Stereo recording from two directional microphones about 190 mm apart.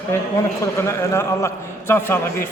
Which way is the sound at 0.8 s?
15° left (ahead or behind).